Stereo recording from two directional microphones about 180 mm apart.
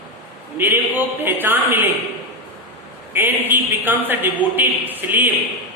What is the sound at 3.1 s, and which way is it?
A man's voice, 10° right (ahead or behind).